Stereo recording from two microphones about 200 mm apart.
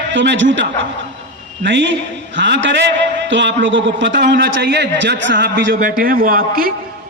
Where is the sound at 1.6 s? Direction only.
65° right (ahead or behind).